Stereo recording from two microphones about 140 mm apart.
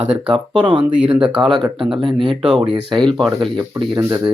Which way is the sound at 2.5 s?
5° right (ahead or behind).